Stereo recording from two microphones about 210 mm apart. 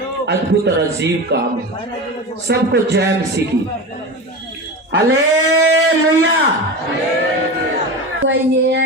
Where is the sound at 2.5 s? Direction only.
55° right (ahead or behind).